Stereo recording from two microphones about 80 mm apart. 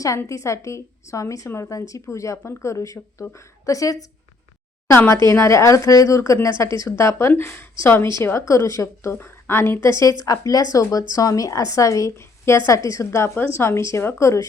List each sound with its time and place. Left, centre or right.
0.3 s a woman's voice: left
9.1 s a woman's voice: left